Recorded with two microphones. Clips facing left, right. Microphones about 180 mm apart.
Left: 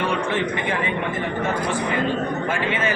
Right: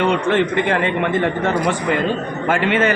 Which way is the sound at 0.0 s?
70° right (ahead or behind).